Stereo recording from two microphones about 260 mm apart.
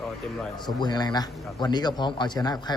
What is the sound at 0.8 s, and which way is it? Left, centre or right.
A man's voice, centre.